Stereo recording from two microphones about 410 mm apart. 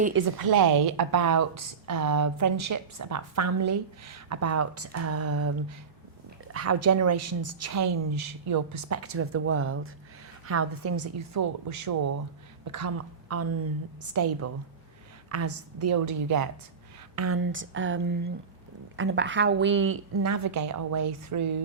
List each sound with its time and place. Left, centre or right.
0.5 s a woman's voice: right
17.2 s a woman's voice: right